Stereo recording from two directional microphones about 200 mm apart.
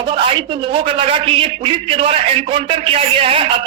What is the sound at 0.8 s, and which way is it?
A man's voice, 25° right (ahead or behind).